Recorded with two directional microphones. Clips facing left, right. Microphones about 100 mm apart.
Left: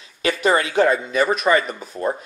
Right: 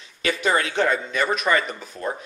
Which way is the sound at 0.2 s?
5° left (ahead or behind).